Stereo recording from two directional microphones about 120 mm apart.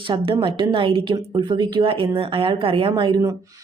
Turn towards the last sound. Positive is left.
turn(degrees=-40)  # may be behind; listen again after turning